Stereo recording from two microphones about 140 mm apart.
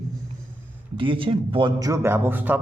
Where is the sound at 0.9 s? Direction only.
35° right (ahead or behind).